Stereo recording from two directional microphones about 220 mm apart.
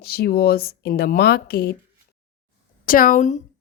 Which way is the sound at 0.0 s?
45° left (ahead or behind).